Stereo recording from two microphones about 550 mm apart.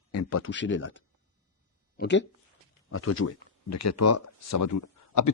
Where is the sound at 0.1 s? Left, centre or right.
Left.